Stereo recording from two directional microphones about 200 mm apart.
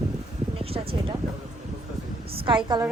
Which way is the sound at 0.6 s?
30° right (ahead or behind).